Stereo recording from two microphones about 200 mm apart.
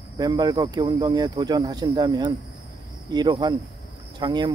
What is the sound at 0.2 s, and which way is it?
Speech, 20° right (ahead or behind).